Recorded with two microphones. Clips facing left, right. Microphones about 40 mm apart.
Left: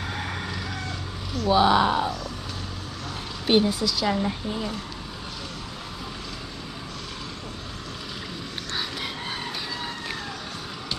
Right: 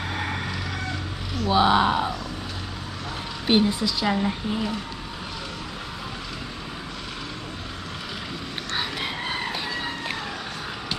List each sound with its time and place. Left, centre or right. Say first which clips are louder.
1.4 s a woman's voice: even; centre
3.4 s a woman's voice: even; centre
8.7 s a sound: right 3 dB; right